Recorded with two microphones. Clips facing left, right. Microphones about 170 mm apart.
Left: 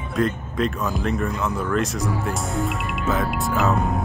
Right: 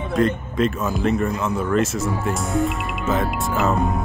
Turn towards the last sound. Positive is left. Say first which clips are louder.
# even
turn(degrees=0)  # may be behind; listen again after turning